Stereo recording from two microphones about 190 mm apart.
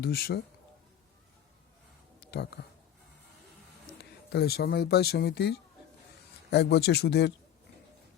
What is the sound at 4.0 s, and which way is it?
Speech, 55° left (ahead or behind).